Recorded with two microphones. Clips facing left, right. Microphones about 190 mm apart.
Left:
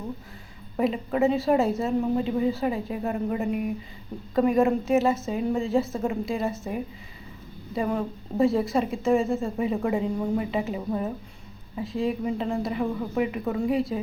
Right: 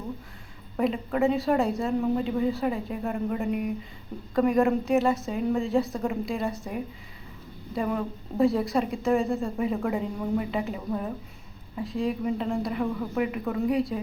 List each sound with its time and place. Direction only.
0.8 s a woman's voice: centre (ahead or behind)